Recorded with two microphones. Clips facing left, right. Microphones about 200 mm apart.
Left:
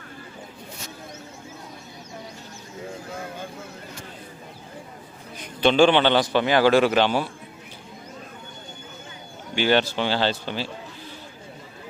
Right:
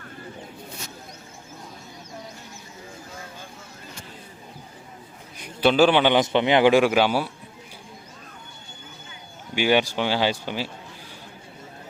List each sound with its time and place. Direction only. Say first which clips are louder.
5.5 s a man's voice: even; 5° right (ahead or behind)
9.6 s a man's voice: even; 10° right (ahead or behind)